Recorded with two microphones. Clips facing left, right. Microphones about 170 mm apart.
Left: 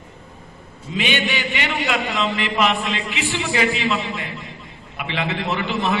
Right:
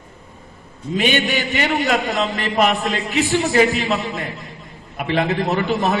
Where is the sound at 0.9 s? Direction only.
45° right (ahead or behind).